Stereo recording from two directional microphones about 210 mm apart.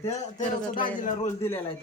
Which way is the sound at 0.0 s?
35° left (ahead or behind).